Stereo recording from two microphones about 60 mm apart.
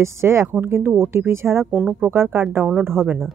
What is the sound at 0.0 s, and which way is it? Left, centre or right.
Speech, right.